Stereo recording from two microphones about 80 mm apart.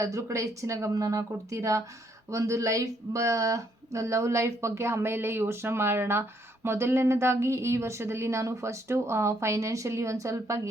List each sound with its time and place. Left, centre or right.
0.0 s speech: right